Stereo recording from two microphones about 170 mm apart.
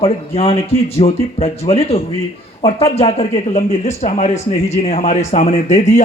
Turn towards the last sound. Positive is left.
turn(degrees=40)  # may be behind; listen again after turning